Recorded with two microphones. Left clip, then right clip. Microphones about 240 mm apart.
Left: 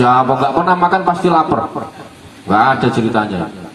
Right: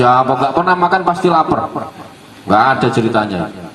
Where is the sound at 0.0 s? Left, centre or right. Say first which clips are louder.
Even; right.